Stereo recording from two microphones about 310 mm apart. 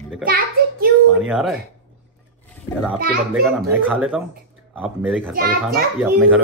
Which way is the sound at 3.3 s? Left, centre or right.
Centre.